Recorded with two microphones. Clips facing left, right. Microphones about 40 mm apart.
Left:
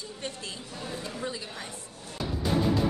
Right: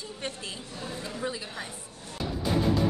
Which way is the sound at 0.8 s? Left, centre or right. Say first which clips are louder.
Right 1 dB; centre.